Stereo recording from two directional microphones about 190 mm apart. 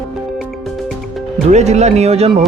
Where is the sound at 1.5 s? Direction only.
35° right (ahead or behind).